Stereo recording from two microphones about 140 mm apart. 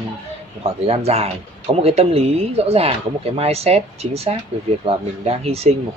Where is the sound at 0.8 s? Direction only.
45° right (ahead or behind).